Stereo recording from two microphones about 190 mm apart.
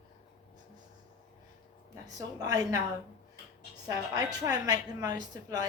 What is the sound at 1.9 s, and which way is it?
Speech, 20° right (ahead or behind).